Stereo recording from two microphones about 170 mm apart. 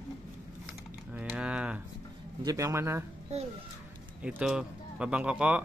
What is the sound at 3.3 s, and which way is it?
Speech, 40° right (ahead or behind).